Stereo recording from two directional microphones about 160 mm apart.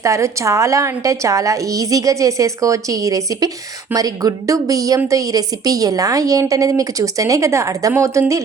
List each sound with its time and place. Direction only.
0.0 s a woman's voice: 20° right (ahead or behind)